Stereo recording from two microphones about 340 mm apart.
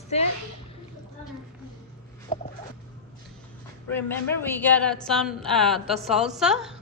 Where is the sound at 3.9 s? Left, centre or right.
Centre.